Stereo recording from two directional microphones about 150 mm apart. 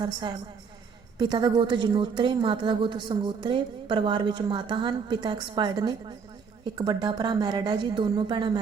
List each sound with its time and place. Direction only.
0.0 s a woman's voice: 30° right (ahead or behind)